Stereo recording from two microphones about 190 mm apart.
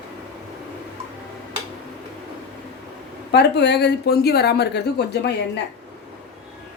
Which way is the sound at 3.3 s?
65° left (ahead or behind).